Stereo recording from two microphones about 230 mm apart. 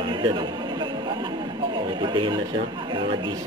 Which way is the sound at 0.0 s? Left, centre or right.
Right.